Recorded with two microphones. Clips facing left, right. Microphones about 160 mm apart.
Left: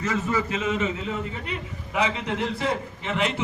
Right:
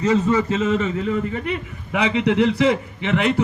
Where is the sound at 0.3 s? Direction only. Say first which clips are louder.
Right 6 dB; 40° right (ahead or behind).